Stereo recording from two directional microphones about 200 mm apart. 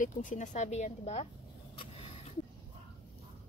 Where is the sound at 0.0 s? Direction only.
40° left (ahead or behind).